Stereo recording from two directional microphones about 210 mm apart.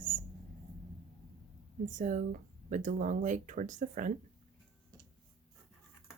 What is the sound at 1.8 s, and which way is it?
Speech, 35° right (ahead or behind).